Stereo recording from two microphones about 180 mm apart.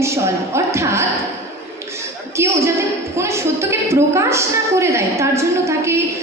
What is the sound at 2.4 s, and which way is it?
A woman's voice, 15° right (ahead or behind).